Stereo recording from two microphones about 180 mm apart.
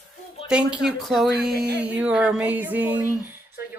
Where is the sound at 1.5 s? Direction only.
60° right (ahead or behind).